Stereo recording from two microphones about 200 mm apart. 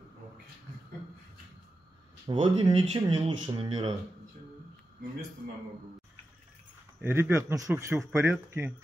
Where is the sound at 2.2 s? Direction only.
25° right (ahead or behind).